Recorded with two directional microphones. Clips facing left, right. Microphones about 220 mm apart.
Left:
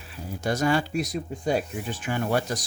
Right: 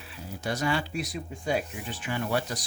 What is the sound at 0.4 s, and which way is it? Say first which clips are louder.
Speech: left 5 dB; 45° left (ahead or behind).